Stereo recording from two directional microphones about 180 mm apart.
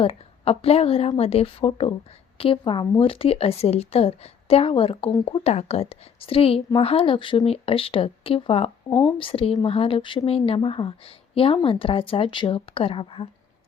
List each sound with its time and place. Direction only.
0.0 s a woman's voice: 30° left (ahead or behind)